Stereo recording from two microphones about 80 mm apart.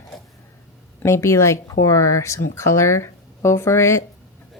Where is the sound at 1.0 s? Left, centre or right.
Left.